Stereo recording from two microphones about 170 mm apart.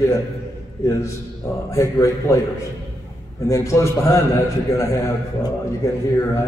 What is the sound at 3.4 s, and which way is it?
Speech, 20° left (ahead or behind).